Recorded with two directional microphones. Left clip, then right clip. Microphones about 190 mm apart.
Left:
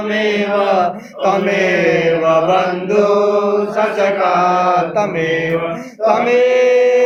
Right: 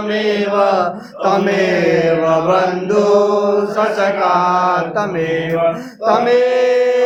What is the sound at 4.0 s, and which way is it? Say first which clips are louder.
Mantra: left 1 dB; 55° right (ahead or behind).